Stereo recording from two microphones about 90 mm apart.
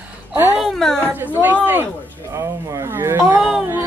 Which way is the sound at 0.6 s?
Centre (ahead or behind).